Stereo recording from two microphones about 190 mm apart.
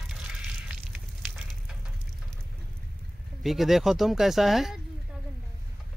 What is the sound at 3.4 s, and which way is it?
Speech, centre (ahead or behind).